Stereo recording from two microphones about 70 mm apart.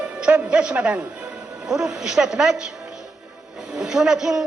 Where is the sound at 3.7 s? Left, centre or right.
Centre.